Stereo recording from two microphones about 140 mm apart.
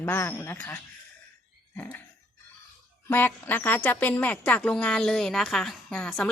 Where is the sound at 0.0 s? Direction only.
15° left (ahead or behind).